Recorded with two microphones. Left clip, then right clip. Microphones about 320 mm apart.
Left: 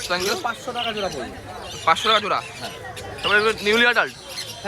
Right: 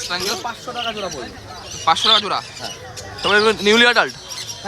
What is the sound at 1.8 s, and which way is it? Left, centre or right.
Speech, centre.